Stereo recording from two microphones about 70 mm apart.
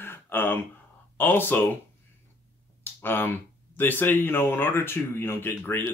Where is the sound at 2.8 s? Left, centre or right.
Left.